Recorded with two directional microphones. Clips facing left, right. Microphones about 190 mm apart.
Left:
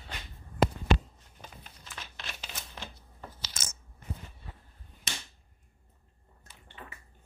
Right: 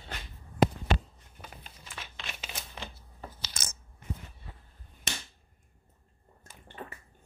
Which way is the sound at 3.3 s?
55° right (ahead or behind).